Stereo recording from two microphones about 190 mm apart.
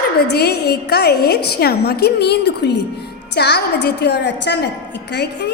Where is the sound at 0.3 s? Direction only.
60° left (ahead or behind).